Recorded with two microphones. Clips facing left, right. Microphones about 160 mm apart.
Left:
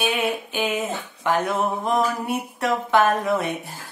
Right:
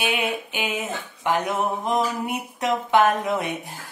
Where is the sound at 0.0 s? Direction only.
15° right (ahead or behind).